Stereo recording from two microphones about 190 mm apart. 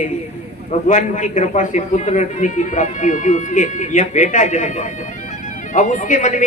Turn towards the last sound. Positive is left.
turn(degrees=40)  # may be behind; listen again after turning